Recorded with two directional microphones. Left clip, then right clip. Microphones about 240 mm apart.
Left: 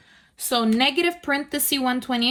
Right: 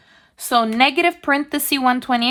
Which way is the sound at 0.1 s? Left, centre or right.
Right.